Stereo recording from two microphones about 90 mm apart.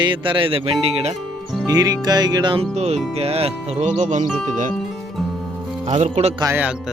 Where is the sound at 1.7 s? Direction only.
45° right (ahead or behind); by 2.6 s 60° right (ahead or behind).